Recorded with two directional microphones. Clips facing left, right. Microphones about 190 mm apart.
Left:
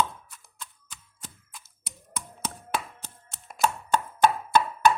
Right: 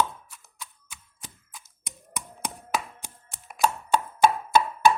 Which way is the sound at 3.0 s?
15° right (ahead or behind).